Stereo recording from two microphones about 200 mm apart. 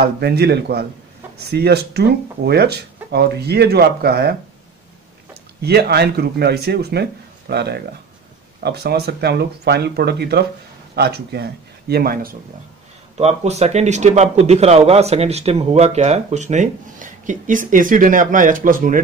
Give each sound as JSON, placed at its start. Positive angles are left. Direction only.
{"t": 0.0, "sound": "speech", "side_deg": -55}
{"t": 13.2, "sound": "a man's voice", "side_deg": -35}